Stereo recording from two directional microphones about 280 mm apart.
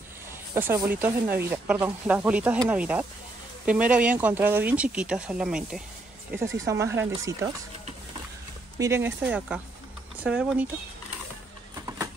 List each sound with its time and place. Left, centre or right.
0.6 s speech: centre
8.7 s speech: centre